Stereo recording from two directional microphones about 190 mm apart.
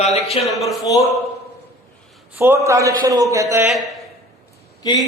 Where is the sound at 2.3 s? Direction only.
10° right (ahead or behind).